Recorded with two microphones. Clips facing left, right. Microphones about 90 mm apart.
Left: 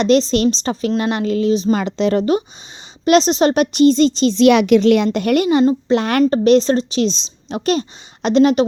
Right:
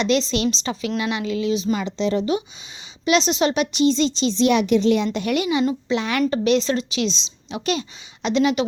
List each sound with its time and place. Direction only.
0.0 s a woman's voice: 45° left (ahead or behind)
1.8 s a woman's voice: 60° left (ahead or behind)
5.0 s a woman's voice: 50° left (ahead or behind)